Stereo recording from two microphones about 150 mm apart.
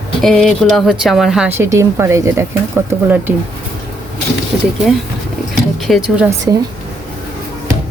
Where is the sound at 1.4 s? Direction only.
15° right (ahead or behind).